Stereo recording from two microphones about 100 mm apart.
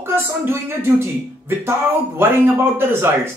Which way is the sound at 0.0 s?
25° right (ahead or behind).